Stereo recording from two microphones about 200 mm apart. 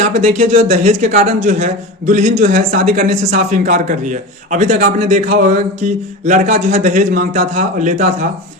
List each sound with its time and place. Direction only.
0.2 s a man's voice: 35° right (ahead or behind)